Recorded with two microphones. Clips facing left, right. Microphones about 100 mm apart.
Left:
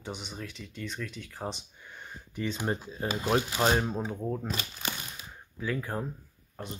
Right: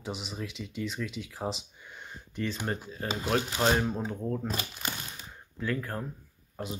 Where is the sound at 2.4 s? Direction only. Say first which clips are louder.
Left 3 dB; 15° left (ahead or behind).